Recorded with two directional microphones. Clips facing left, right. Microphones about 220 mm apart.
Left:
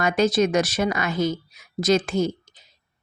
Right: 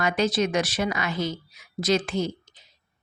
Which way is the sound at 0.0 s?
45° left (ahead or behind).